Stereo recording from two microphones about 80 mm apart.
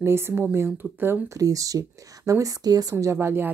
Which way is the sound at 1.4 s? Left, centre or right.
Right.